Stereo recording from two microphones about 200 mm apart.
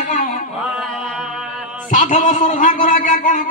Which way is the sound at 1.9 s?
40° left (ahead or behind).